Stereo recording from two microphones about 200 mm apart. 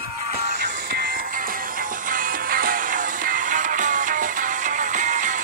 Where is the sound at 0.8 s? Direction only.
45° right (ahead or behind).